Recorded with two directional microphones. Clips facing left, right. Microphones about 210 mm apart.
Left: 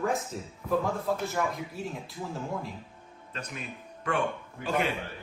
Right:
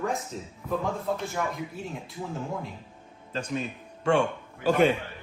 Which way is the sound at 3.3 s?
30° right (ahead or behind).